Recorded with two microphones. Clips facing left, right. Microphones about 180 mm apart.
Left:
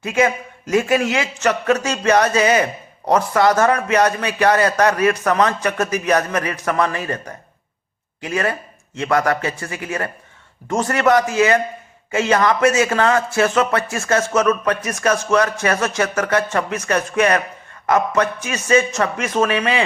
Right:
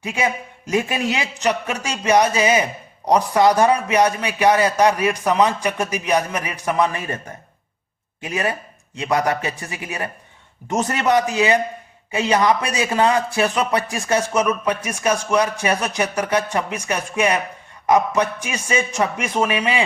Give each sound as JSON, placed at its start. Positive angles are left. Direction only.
{"t": 0.0, "sound": "a man's voice", "side_deg": -15}